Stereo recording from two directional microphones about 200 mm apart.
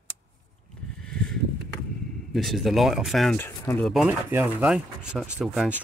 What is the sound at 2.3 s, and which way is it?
Speech, centre (ahead or behind).